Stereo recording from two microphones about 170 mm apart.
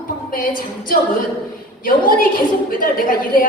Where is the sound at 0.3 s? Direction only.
55° left (ahead or behind).